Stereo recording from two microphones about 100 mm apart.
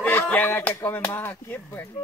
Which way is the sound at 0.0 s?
15° left (ahead or behind).